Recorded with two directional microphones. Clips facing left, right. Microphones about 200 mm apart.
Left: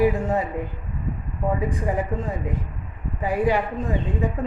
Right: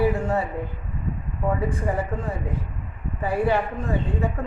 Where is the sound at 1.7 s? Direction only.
15° left (ahead or behind).